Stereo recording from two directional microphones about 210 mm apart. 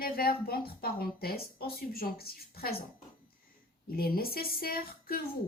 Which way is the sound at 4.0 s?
45° left (ahead or behind).